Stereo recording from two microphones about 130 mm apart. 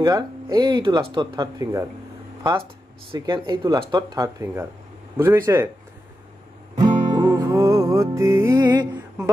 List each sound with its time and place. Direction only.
0.0 s speech: 30° right (ahead or behind)
3.2 s speech: 35° right (ahead or behind); by 5.7 s 20° right (ahead or behind)
6.8 s music: 30° right (ahead or behind)
7.2 s music: 20° right (ahead or behind)